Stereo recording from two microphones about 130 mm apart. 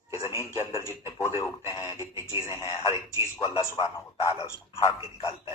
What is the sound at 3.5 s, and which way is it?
Speech, 25° left (ahead or behind).